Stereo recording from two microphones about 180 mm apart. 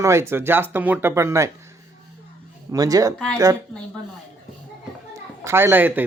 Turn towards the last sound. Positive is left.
turn(degrees=-10)  # may be behind; listen again after turning